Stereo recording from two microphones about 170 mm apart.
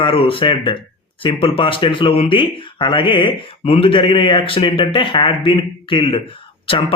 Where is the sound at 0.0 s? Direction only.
30° left (ahead or behind).